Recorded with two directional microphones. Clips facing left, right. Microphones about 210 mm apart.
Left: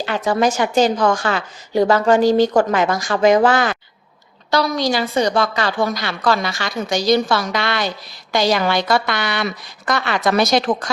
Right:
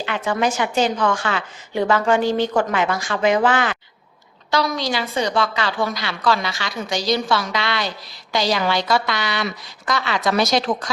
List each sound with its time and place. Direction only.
0.0 s a woman's voice: 40° left (ahead or behind)